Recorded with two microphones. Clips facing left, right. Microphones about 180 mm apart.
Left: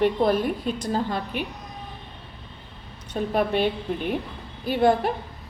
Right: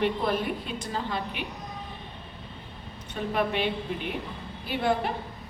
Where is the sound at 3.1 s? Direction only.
40° left (ahead or behind).